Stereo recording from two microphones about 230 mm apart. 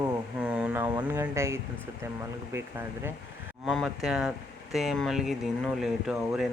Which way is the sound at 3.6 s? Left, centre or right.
Centre.